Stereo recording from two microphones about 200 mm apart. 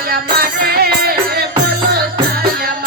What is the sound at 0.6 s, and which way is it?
Music, 50° right (ahead or behind).